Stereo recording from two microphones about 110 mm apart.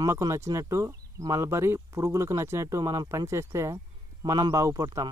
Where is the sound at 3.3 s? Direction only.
25° right (ahead or behind).